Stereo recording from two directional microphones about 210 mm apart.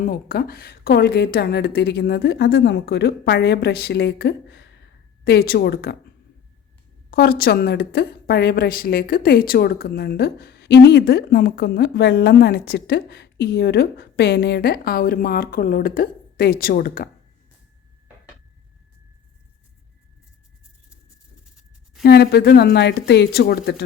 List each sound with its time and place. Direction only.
0.0 s a woman's voice: 45° left (ahead or behind)
7.1 s a woman's voice: 45° left (ahead or behind)
22.0 s a woman's voice: 50° left (ahead or behind)